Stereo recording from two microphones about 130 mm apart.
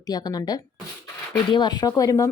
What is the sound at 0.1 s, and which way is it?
A woman's voice, 30° left (ahead or behind).